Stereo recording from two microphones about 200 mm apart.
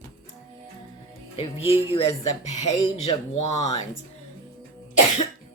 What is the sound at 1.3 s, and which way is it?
Speech, 30° left (ahead or behind).